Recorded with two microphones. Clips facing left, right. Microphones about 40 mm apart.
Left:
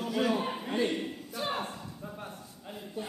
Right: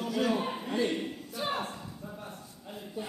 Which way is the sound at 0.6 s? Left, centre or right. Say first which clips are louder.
Even; centre.